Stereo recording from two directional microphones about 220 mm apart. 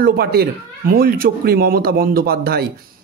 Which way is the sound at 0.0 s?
45° right (ahead or behind).